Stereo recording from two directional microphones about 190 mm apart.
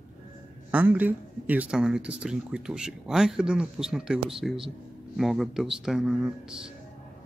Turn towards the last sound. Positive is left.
turn(degrees=-5)  # may be behind; listen again after turning